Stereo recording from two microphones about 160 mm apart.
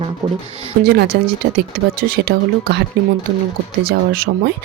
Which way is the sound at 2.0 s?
70° right (ahead or behind).